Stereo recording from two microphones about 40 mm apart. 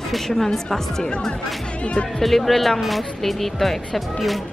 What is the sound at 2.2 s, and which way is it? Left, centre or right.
Speech, centre.